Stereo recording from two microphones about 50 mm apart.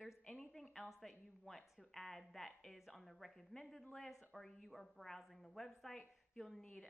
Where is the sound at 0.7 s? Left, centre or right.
Centre.